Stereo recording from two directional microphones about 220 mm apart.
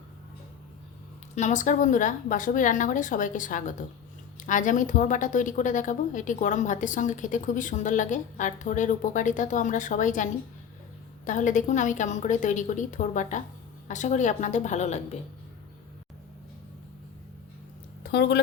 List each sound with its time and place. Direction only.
1.4 s a woman's voice: 35° left (ahead or behind)
11.3 s a woman's voice: 35° left (ahead or behind)
18.0 s speech: 50° left (ahead or behind)